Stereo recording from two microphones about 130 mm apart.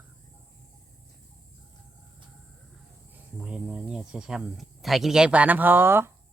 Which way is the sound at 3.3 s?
5° right (ahead or behind).